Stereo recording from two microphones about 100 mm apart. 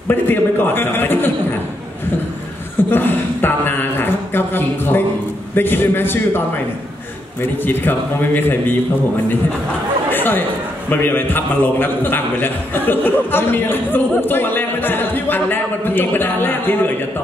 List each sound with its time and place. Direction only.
0.1 s a man's voice: 20° left (ahead or behind)
2.9 s a sound: 20° left (ahead or behind)
5.5 s a man's voice: 20° left (ahead or behind)
7.6 s a man's voice: 20° left (ahead or behind)
10.0 s chatter: 20° left (ahead or behind)
10.9 s a man's voice: 20° left (ahead or behind)